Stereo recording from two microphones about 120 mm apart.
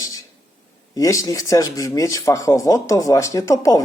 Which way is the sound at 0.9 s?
30° left (ahead or behind).